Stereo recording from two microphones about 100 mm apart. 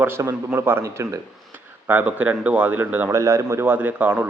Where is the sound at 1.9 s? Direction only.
15° right (ahead or behind).